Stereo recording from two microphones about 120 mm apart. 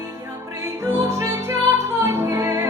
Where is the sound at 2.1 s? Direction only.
20° right (ahead or behind).